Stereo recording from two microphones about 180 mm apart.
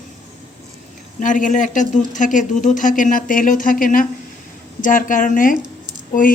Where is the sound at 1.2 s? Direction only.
45° left (ahead or behind).